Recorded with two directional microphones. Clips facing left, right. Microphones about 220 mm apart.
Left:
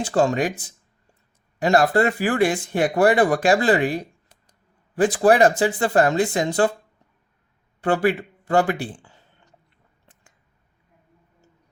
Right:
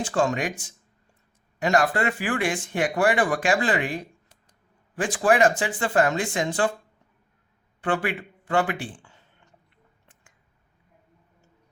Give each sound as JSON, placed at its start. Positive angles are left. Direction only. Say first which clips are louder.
{"t": 0.0, "sound": "speech", "louder": "left 4 dB", "side_deg": 35}
{"t": 7.8, "sound": "speech", "louder": "left 6 dB", "side_deg": 40}